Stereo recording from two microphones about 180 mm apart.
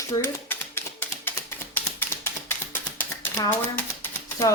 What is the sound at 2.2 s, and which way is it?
Typewriter, 10° left (ahead or behind).